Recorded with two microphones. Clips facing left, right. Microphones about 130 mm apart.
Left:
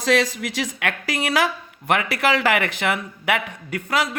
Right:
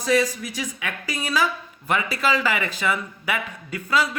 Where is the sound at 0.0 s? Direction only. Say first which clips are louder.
Left 1 dB; 90° left.